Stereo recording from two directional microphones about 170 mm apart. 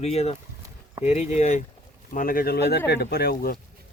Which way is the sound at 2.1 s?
60° left (ahead or behind).